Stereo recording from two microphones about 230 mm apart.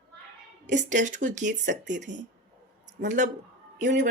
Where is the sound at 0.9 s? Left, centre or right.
Right.